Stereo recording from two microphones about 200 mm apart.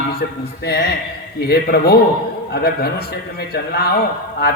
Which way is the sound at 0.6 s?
50° left (ahead or behind).